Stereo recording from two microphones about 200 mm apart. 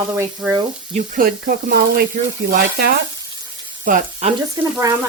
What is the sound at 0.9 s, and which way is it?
Speech, 45° right (ahead or behind).